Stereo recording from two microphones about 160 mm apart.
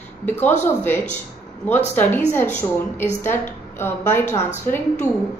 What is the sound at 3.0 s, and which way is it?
A woman's voice, 15° left (ahead or behind).